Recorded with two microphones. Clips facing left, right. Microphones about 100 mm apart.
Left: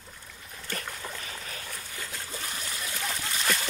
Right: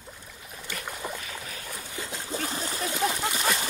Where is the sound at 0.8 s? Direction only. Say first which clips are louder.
Right 4 dB; 15° right (ahead or behind).